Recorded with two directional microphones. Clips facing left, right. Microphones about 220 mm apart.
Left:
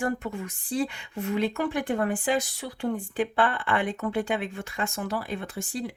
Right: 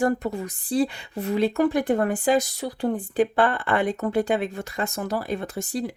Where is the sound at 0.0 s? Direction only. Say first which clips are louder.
Right 6 dB; 35° right (ahead or behind).